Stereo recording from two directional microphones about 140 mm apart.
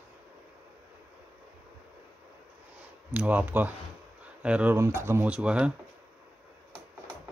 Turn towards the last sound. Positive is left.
turn(degrees=-5)  # may be behind; listen again after turning